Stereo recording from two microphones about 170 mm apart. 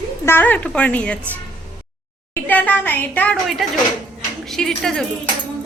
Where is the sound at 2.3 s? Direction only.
10° left (ahead or behind).